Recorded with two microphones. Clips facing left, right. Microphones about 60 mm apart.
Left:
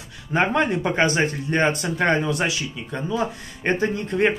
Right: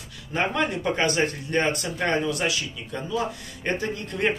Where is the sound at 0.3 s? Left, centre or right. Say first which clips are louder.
Left 5 dB; left.